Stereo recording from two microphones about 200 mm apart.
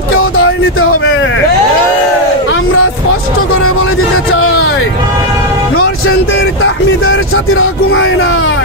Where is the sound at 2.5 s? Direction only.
90° left.